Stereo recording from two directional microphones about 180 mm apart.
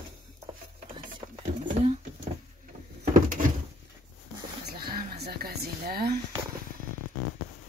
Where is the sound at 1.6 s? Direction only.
35° right (ahead or behind).